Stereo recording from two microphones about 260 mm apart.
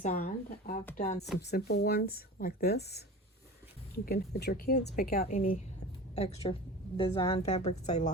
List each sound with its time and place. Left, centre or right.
0.0 s a woman's voice: left